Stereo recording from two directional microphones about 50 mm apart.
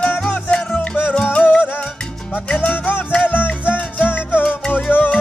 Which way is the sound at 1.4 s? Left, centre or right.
Left.